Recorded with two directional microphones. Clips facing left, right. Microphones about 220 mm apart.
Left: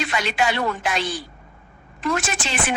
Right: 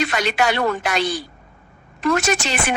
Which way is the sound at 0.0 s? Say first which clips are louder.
Right 3 dB; 65° right (ahead or behind).